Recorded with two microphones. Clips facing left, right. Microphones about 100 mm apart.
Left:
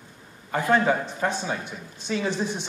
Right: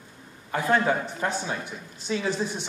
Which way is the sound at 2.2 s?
20° left (ahead or behind).